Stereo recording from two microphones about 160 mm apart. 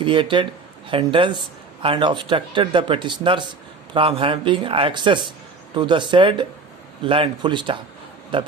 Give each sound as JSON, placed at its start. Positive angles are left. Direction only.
{"t": 0.0, "sound": "speech", "side_deg": -30}